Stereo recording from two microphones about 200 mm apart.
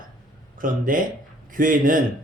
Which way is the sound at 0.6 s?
45° right (ahead or behind).